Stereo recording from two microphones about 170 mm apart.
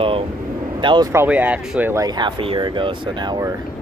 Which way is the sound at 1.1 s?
15° right (ahead or behind).